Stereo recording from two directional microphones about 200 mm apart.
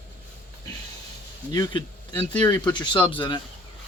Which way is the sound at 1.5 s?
20° left (ahead or behind).